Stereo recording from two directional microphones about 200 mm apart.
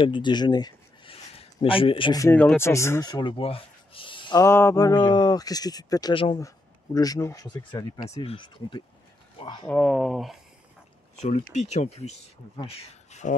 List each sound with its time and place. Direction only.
0.0 s speech: 25° left (ahead or behind)
9.7 s speech: 5° left (ahead or behind)
11.2 s speech: 35° left (ahead or behind)